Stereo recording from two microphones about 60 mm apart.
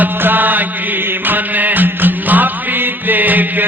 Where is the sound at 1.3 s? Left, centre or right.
Right.